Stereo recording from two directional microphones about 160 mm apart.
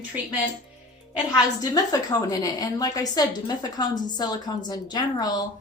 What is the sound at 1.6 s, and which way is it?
Speech, 20° left (ahead or behind).